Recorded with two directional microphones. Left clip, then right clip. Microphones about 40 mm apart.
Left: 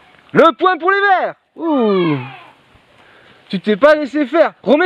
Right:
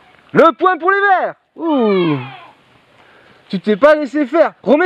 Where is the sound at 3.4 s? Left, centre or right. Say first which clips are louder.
Even; right.